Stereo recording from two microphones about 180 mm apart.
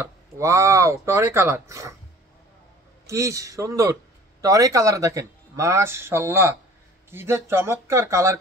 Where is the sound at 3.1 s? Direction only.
15° right (ahead or behind).